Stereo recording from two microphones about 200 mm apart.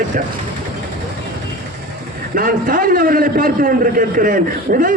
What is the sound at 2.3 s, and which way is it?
A man's voice, 45° right (ahead or behind).